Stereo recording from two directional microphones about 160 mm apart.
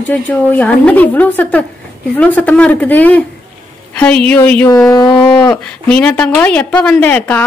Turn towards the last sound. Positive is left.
turn(degrees=10)  # may be behind; listen again after turning